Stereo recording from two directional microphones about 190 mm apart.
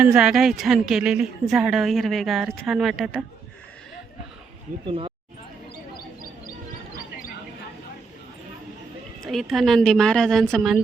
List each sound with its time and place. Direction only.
0.0 s a woman's voice: 5° right (ahead or behind)
4.9 s speech: 25° right (ahead or behind)
9.2 s a woman's voice: centre (ahead or behind)